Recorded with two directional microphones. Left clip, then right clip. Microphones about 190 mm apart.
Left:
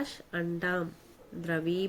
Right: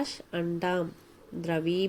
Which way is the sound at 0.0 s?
15° right (ahead or behind).